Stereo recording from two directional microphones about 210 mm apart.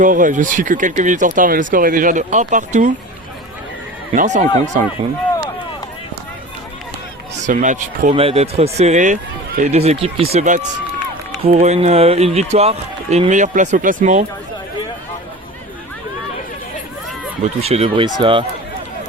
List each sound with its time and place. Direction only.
0.0 s speech: 40° right (ahead or behind)
4.1 s speech: 40° right (ahead or behind)
7.4 s speech: 35° right (ahead or behind)
17.4 s speech: 30° right (ahead or behind)